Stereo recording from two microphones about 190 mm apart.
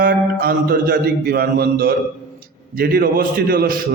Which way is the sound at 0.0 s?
50° right (ahead or behind).